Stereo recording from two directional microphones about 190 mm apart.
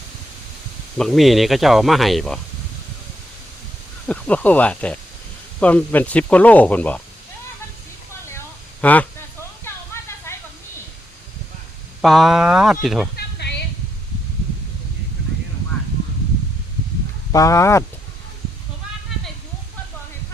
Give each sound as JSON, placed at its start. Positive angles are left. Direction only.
{"t": 0.9, "sound": "speech", "side_deg": 0}
{"t": 4.0, "sound": "speech", "side_deg": 5}
{"t": 8.8, "sound": "speech", "side_deg": 10}
{"t": 9.6, "sound": "a sound", "side_deg": 15}
{"t": 12.0, "sound": "speech", "side_deg": 0}
{"t": 13.1, "sound": "a sound", "side_deg": 60}
{"t": 17.3, "sound": "speech", "side_deg": 15}